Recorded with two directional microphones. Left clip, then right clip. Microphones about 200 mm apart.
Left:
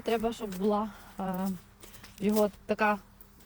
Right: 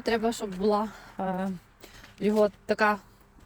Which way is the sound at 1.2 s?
35° right (ahead or behind).